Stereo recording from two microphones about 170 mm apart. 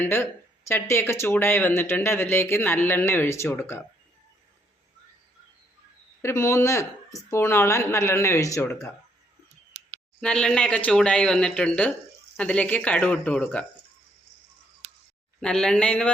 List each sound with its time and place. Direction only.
0.0 s speech: 15° left (ahead or behind)
6.2 s speech: 15° left (ahead or behind)
10.2 s speech: 5° left (ahead or behind)
15.4 s speech: 5° left (ahead or behind)